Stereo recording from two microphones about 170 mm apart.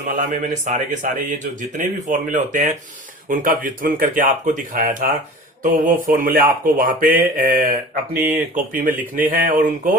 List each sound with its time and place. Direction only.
0.1 s speech: 45° right (ahead or behind)